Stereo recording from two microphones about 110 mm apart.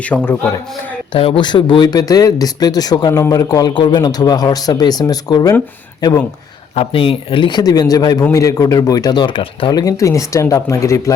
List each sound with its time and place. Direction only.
0.0 s a man's voice: 15° left (ahead or behind)
1.1 s a man's voice: 50° left (ahead or behind); by 5.5 s 35° left (ahead or behind)
6.7 s a man's voice: 55° left (ahead or behind)
9.7 s speech: 30° left (ahead or behind)